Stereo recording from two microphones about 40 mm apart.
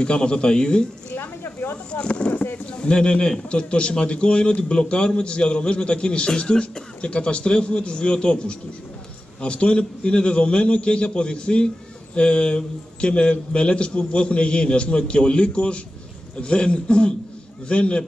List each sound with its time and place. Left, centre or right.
0.0 s a man's voice: left
1.1 s a sound: left
1.9 s a man's voice: left